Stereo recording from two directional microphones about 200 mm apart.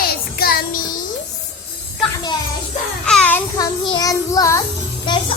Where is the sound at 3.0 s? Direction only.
5° left (ahead or behind).